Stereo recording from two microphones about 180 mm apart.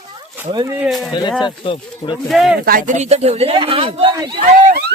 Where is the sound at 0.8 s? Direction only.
Centre (ahead or behind).